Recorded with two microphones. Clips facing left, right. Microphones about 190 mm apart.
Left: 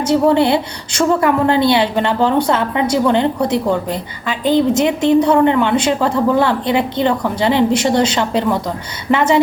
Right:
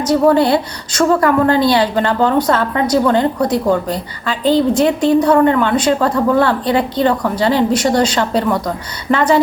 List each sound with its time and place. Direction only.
0.0 s a woman's voice: 25° left (ahead or behind)
9.1 s a woman's voice: 20° left (ahead or behind)